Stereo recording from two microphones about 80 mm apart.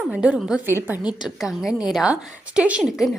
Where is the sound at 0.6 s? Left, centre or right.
Right.